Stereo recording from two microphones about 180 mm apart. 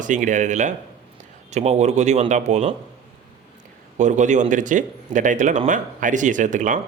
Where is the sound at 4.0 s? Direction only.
40° right (ahead or behind).